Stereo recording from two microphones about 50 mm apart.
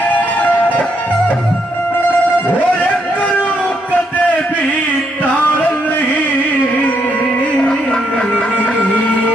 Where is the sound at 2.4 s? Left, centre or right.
Left.